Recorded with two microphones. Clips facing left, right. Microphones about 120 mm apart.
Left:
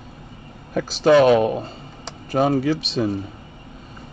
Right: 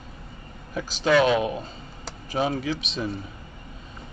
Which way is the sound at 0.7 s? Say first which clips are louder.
Left 7 dB; 50° left (ahead or behind).